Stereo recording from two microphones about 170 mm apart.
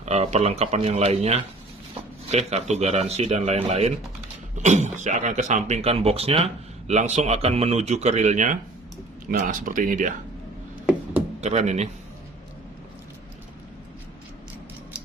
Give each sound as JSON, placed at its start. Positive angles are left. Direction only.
{"t": 0.0, "sound": "speech", "side_deg": -40}
{"t": 11.3, "sound": "speech", "side_deg": -40}